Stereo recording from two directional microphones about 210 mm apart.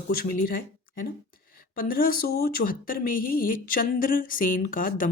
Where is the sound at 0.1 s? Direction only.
45° left (ahead or behind).